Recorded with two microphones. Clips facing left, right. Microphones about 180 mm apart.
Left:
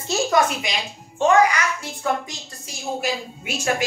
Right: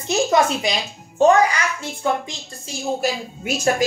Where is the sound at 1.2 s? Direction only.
40° right (ahead or behind).